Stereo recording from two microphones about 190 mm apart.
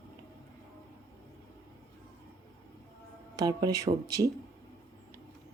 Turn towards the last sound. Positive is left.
turn(degrees=-15)  # may be behind; listen again after turning